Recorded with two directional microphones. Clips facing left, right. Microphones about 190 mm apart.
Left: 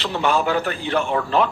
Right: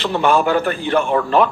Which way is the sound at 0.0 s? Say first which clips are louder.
Right 4 dB; 55° right (ahead or behind).